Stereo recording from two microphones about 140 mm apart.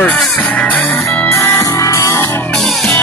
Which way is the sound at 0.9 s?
20° left (ahead or behind).